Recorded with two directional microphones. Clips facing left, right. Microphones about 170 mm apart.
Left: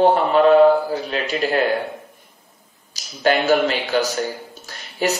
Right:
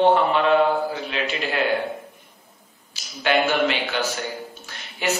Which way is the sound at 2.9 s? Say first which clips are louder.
Left 3 dB; 40° left (ahead or behind).